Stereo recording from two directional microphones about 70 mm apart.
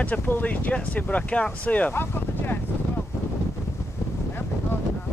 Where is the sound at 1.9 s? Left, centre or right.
Left.